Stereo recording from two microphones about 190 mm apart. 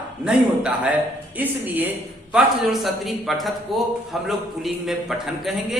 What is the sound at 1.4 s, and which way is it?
A woman's voice, 10° right (ahead or behind).